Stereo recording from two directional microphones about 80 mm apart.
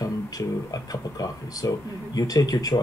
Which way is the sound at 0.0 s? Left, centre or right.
Left.